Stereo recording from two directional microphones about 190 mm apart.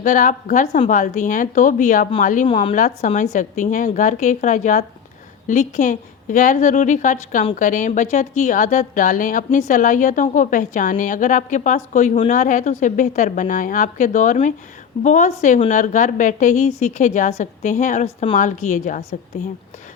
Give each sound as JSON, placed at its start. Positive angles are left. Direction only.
{"t": 0.0, "sound": "a woman's voice", "side_deg": 40}
{"t": 2.5, "sound": "a woman's voice", "side_deg": 30}
{"t": 2.7, "sound": "a woman's voice", "side_deg": 40}